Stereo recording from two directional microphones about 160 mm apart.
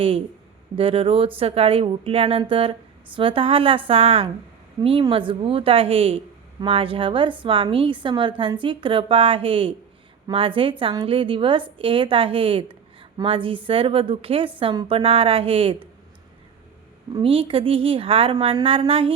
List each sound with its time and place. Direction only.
0.8 s a woman's voice: 35° right (ahead or behind)
17.2 s a woman's voice: 35° right (ahead or behind)